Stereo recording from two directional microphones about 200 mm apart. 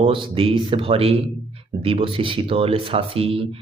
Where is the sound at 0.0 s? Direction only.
25° right (ahead or behind).